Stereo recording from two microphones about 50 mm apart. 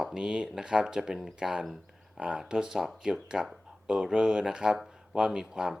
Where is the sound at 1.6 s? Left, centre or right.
Centre.